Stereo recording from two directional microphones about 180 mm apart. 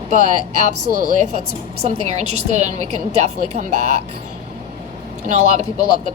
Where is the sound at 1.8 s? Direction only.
40° right (ahead or behind).